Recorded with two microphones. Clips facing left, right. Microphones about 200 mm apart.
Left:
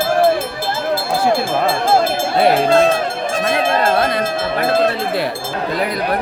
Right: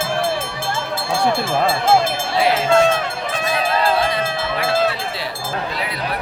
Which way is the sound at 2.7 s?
35° left (ahead or behind).